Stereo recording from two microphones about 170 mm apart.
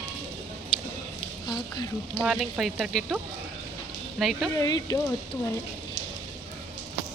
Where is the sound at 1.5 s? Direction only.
25° left (ahead or behind).